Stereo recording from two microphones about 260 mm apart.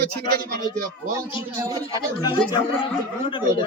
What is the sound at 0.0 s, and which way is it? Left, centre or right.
Speech, right.